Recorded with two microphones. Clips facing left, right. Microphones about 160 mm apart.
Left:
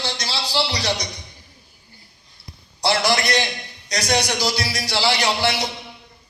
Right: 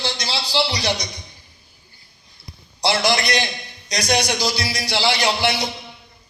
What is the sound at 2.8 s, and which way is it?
A man's voice, 15° right (ahead or behind).